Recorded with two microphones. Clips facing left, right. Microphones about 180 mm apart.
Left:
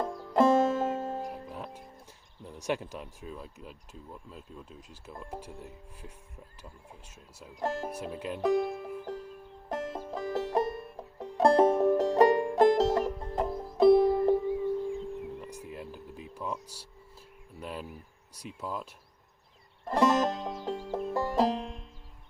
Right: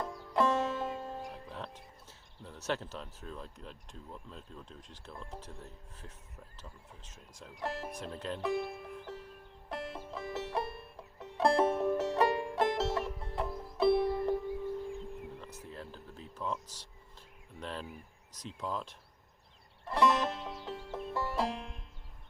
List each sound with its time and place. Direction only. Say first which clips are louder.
0.1 s music: left 7 dB; 45° left (ahead or behind)
1.3 s music: left 4 dB; 10° left (ahead or behind)
2.4 s speech: left 4 dB; 15° left (ahead or behind)
7.6 s speech: left 6 dB; 45° left (ahead or behind)
7.9 s speech: left 3 dB; 10° left (ahead or behind)
8.4 s music: left 9 dB; 45° left (ahead or behind)
14.4 s music: left 7 dB; 65° left (ahead or behind)
15.4 s a sound: left 5 dB; 15° left (ahead or behind)
17.6 s speech: left 2 dB; 10° left (ahead or behind)
19.8 s music: left 4 dB; 45° left (ahead or behind)